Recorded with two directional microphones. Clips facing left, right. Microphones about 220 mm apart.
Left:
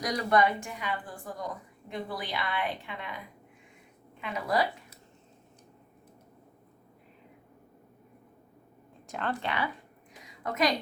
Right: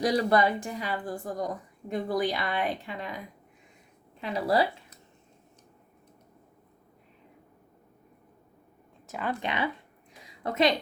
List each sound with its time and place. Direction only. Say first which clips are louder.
0.0 s a woman's voice: right 3 dB; 30° right (ahead or behind)
4.2 s a woman's voice: right 4 dB; 35° right (ahead or behind)
9.0 s speech: right 1 dB; 5° right (ahead or behind)
9.4 s a woman's voice: right 2 dB; 20° right (ahead or behind)